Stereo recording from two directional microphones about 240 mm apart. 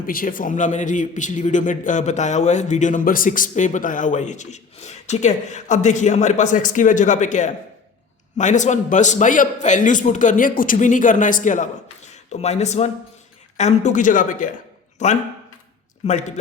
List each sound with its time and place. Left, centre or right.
0.0 s a man's voice: left